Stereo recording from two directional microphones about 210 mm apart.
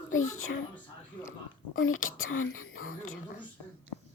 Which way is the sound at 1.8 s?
70° left (ahead or behind).